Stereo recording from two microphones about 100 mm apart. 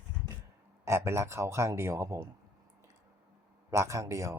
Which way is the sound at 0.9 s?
25° right (ahead or behind).